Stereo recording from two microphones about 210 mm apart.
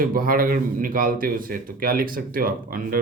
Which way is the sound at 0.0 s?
45° right (ahead or behind).